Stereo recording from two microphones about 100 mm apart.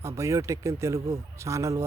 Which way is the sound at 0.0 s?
30° right (ahead or behind).